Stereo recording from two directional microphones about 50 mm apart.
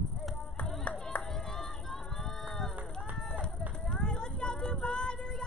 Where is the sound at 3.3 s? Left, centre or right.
Centre.